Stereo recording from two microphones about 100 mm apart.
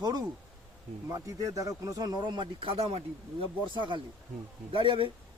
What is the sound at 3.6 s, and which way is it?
Speech, 55° right (ahead or behind).